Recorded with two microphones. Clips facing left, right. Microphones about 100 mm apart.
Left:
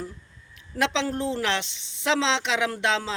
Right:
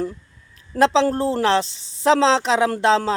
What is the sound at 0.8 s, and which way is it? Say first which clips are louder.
A woman's voice: right 9 dB; 35° right (ahead or behind).